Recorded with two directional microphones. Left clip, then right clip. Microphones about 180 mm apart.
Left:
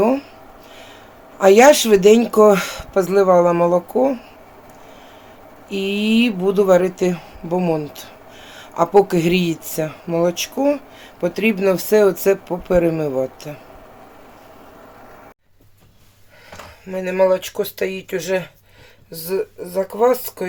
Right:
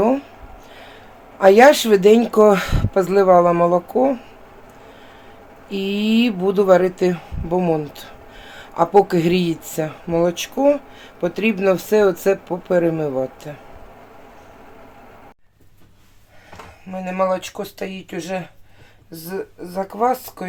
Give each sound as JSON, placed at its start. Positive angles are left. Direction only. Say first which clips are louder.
{"t": 0.0, "sound": "speech", "louder": "left 1 dB", "side_deg": 0}
{"t": 1.4, "sound": "speech", "louder": "even", "side_deg": 0}
{"t": 5.6, "sound": "speech", "louder": "left 2 dB", "side_deg": 0}
{"t": 16.9, "sound": "speech", "louder": "left 4 dB", "side_deg": 25}